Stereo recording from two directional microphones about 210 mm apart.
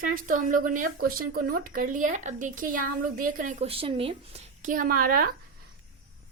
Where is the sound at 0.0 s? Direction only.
40° right (ahead or behind).